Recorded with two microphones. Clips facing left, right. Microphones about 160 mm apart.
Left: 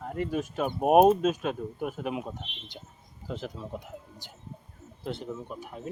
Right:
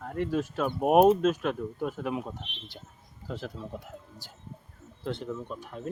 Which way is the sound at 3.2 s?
20° left (ahead or behind).